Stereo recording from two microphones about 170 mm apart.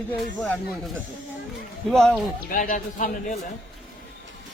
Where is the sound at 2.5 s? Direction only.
55° left (ahead or behind).